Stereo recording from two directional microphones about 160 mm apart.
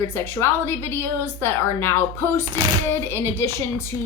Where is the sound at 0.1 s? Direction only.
15° left (ahead or behind).